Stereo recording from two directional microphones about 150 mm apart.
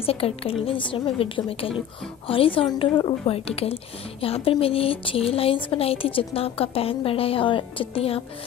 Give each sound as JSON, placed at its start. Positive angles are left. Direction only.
{"t": 0.0, "sound": "speech", "side_deg": 40}